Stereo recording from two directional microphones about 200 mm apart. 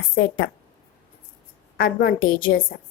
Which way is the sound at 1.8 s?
50° left (ahead or behind).